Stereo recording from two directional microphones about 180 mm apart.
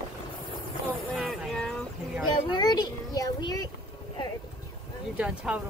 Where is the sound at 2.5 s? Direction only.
20° left (ahead or behind).